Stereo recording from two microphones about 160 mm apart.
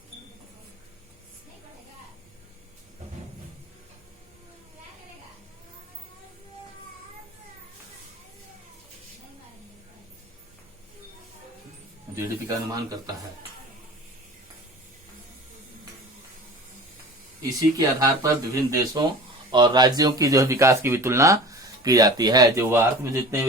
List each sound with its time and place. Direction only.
12.1 s speech: 20° right (ahead or behind)
17.4 s speech: 20° right (ahead or behind)